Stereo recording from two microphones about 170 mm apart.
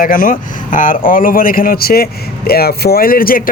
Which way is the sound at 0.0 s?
55° left (ahead or behind).